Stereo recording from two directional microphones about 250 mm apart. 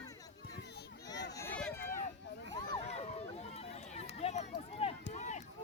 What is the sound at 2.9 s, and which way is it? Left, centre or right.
Run, left.